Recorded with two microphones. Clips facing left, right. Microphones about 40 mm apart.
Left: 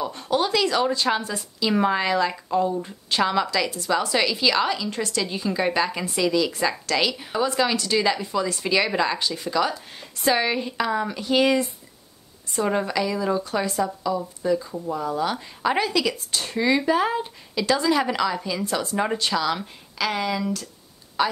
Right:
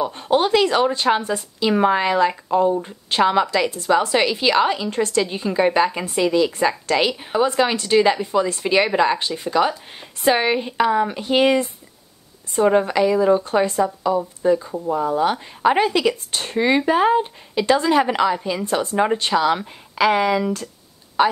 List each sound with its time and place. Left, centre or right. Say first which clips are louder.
0.0 s speech: right 5 dB; right
1.7 s speech: right 4 dB; centre
12.6 s speech: right 8 dB; right